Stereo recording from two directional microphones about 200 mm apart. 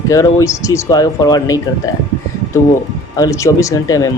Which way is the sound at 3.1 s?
15° left (ahead or behind).